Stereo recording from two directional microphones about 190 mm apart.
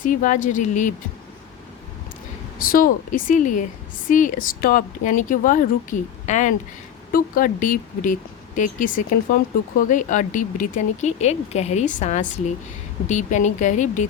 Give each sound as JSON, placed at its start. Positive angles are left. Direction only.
{"t": 0.0, "sound": "speech", "side_deg": 45}
{"t": 2.6, "sound": "speech", "side_deg": 50}